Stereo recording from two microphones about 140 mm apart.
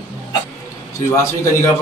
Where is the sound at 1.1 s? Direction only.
20° left (ahead or behind).